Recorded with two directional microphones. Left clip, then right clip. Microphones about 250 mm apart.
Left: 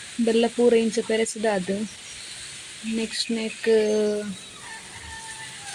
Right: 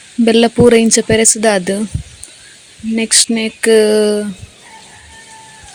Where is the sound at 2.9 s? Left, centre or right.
Right.